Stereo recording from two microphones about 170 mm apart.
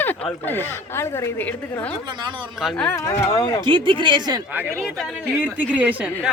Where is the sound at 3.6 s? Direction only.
30° right (ahead or behind).